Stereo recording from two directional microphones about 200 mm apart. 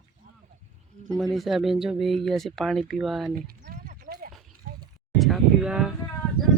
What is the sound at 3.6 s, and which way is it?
Clip-clop, 50° right (ahead or behind).